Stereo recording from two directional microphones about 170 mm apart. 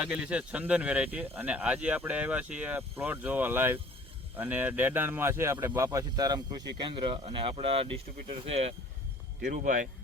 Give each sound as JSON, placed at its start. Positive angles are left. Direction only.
{"t": 0.0, "sound": "speech", "side_deg": -5}
{"t": 9.4, "sound": "speech", "side_deg": -50}